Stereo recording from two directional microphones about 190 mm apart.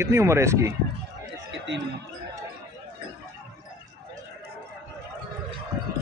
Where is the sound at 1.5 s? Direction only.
70° right (ahead or behind).